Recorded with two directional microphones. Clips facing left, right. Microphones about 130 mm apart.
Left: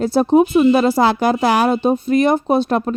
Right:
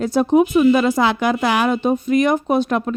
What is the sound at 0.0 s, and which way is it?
Speech, 30° left (ahead or behind).